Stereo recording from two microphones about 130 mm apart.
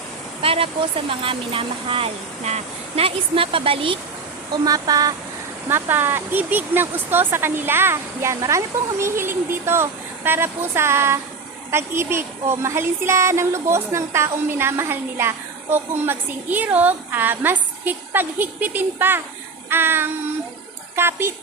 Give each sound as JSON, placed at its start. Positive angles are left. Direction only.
{"t": 0.4, "sound": "speech", "side_deg": -45}
{"t": 4.5, "sound": "speech", "side_deg": -30}
{"t": 5.6, "sound": "speech", "side_deg": -15}